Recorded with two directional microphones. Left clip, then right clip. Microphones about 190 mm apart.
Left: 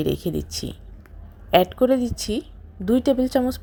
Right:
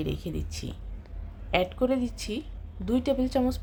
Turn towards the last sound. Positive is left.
turn(degrees=25)  # may be behind; listen again after turning